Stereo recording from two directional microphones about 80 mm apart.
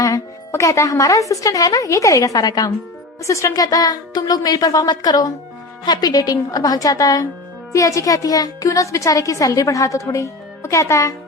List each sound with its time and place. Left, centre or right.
0.0 s speech: left
3.2 s speech: left